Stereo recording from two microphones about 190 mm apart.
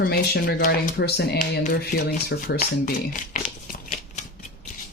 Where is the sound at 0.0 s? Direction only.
55° left (ahead or behind).